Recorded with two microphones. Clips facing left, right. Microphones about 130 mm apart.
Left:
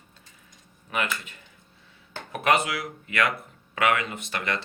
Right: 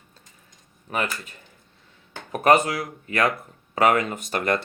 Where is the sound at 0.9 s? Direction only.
40° right (ahead or behind).